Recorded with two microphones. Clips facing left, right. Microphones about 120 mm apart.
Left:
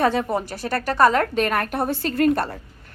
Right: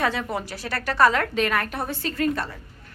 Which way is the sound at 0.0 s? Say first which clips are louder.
Left 5 dB; 45° left (ahead or behind).